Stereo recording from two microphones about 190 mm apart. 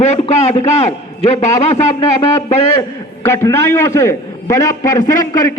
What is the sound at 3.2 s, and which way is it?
A man's voice, 15° left (ahead or behind).